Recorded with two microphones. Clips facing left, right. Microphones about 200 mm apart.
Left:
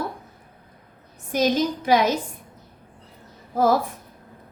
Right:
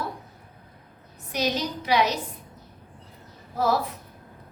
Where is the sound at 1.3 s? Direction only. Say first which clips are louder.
Left 6 dB; 50° left (ahead or behind).